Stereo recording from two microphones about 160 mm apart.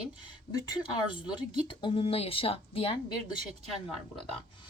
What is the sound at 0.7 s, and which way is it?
Speech, 30° left (ahead or behind).